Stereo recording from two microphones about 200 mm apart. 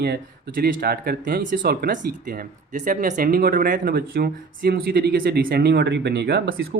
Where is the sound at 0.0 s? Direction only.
50° right (ahead or behind).